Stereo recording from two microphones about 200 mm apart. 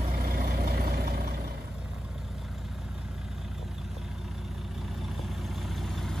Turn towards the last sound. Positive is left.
turn(degrees=0)  # may be behind; listen again after turning